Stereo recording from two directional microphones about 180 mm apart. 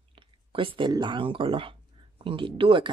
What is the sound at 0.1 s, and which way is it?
Speech, 30° right (ahead or behind).